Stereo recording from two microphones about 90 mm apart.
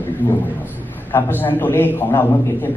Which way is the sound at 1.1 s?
20° left (ahead or behind).